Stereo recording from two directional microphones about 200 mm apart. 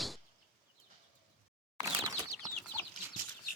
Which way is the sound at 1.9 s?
15° right (ahead or behind).